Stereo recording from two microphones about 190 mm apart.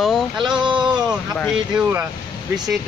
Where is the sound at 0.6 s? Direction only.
25° right (ahead or behind).